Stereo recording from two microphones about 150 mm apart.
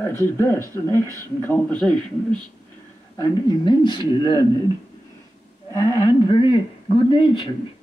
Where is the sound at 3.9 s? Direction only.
30° left (ahead or behind).